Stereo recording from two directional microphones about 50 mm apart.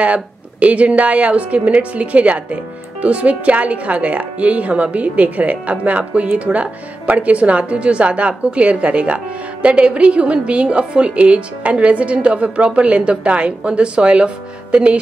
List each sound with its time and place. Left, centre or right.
0.0 s a woman's voice: right